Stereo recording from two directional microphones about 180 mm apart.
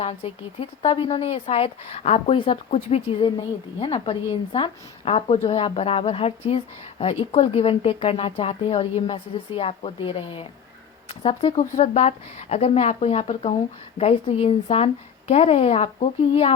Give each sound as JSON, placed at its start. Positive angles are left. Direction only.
{"t": 0.0, "sound": "speech", "side_deg": 35}